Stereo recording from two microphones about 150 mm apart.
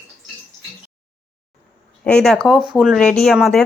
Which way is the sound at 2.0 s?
5° left (ahead or behind).